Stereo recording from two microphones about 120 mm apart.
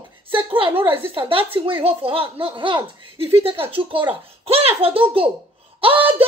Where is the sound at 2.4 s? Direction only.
45° right (ahead or behind).